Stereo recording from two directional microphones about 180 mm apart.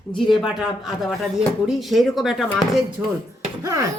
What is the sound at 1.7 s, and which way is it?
Speech, centre (ahead or behind).